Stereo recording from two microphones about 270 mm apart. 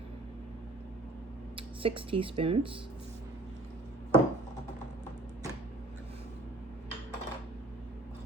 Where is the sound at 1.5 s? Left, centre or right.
Centre.